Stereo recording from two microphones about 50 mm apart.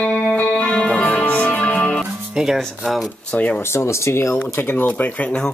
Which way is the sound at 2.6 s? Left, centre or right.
Centre.